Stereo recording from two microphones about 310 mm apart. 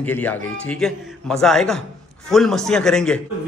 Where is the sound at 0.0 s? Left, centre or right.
Centre.